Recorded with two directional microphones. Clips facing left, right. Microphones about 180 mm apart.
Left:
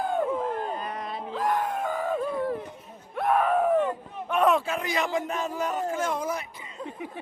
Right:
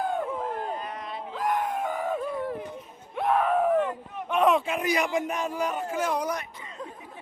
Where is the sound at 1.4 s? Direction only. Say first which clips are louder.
Even; 15° right (ahead or behind).